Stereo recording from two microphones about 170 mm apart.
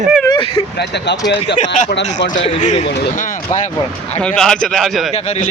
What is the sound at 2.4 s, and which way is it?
Speech, 45° left (ahead or behind).